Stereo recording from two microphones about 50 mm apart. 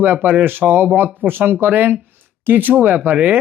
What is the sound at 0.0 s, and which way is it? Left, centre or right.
Speech, right.